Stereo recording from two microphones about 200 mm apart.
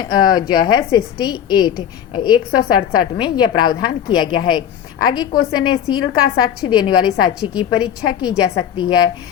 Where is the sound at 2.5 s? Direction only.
90° left.